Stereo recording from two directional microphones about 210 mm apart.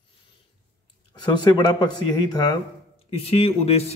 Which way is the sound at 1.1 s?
20° left (ahead or behind).